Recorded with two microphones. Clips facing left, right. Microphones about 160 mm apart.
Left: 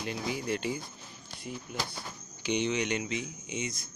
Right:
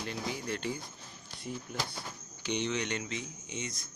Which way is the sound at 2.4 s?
10° left (ahead or behind).